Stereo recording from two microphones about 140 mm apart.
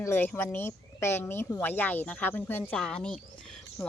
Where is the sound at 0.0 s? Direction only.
15° left (ahead or behind).